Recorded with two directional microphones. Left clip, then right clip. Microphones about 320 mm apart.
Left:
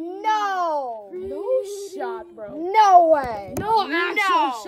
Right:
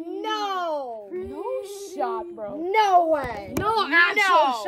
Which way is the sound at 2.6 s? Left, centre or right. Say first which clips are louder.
Left 5 dB; centre.